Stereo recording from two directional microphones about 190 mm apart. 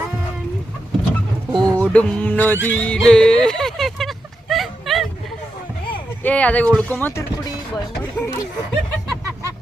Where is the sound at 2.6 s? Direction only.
10° left (ahead or behind).